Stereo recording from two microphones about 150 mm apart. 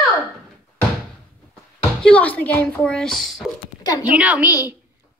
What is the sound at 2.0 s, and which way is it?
A woman's voice, 10° left (ahead or behind).